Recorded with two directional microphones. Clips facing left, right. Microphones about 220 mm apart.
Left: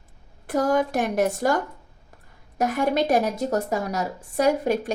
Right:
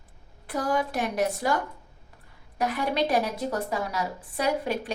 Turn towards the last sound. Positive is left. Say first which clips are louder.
# left 6 dB
turn(degrees=45)  # may be behind; listen again after turning